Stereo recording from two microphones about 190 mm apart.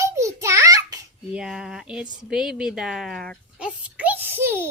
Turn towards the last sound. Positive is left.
turn(degrees=-10)  # may be behind; listen again after turning